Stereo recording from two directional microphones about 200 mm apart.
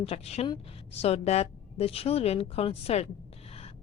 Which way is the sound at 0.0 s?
30° left (ahead or behind).